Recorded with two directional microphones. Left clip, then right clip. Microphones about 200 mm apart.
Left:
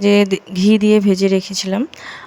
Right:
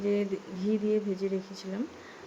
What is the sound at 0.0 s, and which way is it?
Speech, 60° left (ahead or behind).